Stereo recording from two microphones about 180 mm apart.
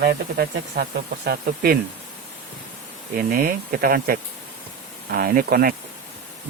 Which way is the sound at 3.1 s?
50° right (ahead or behind).